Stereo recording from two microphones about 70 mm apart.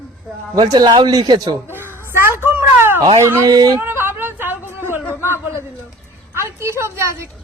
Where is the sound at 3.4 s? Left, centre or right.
Right.